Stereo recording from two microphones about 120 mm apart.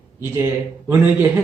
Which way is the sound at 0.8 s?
15° right (ahead or behind).